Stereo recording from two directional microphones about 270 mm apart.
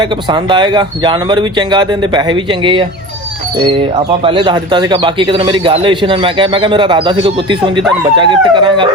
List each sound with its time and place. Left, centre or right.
0.0 s speech: centre
4.2 s speech: centre